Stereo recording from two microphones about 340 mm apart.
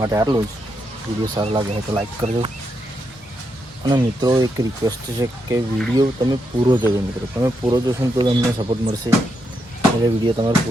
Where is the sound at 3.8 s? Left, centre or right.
Centre.